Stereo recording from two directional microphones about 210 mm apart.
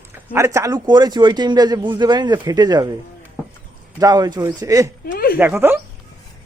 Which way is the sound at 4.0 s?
20° right (ahead or behind).